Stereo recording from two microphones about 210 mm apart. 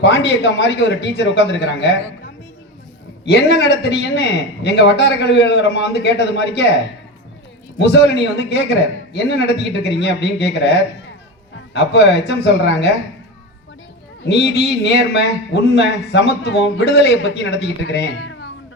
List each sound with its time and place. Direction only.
0.0 s a man's voice: 55° left (ahead or behind)
7.8 s a man's voice: 55° left (ahead or behind)
14.3 s a man's voice: 50° left (ahead or behind)